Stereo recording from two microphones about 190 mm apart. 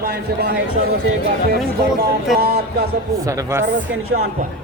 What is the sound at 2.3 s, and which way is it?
Speech, 55° right (ahead or behind).